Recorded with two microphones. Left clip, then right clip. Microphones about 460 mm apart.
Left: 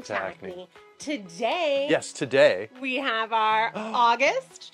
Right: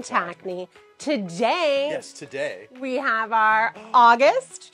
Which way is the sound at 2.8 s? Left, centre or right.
Right.